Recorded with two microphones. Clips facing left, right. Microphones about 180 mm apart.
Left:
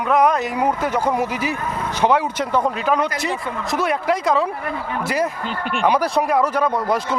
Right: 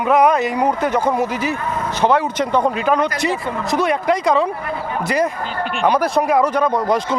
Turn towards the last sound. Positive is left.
turn(degrees=5)  # may be behind; listen again after turning